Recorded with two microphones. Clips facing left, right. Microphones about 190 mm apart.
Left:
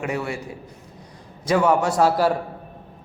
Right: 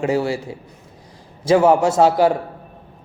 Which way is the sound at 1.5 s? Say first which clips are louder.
Right 5 dB; 25° right (ahead or behind).